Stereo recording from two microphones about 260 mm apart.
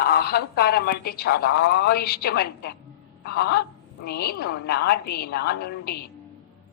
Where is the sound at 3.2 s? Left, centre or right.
Left.